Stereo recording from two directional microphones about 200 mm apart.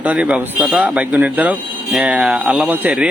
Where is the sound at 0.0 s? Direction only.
5° right (ahead or behind).